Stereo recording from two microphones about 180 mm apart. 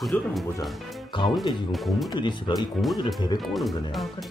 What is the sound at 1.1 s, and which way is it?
Speech, 25° left (ahead or behind).